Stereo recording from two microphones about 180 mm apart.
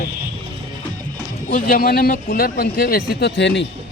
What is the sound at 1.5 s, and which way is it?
Speech, 50° left (ahead or behind).